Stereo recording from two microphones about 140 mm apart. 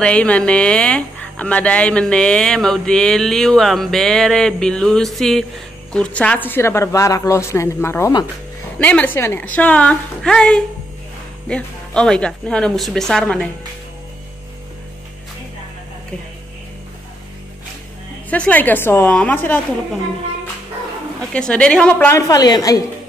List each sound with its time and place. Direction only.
0.0 s a woman's voice: 10° left (ahead or behind)
18.3 s a woman's voice: 10° left (ahead or behind)
21.3 s a woman's voice: 5° left (ahead or behind); by 22.8 s 25° left (ahead or behind)